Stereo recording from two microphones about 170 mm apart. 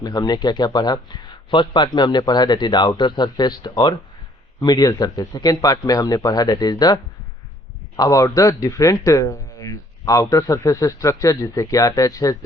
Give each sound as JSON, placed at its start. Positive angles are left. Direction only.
{"t": 0.0, "sound": "speech", "side_deg": 25}